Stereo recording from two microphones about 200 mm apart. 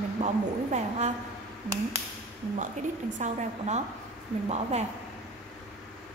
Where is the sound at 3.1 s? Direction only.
35° right (ahead or behind).